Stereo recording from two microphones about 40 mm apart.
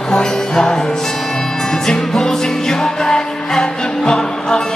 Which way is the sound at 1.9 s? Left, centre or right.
Centre.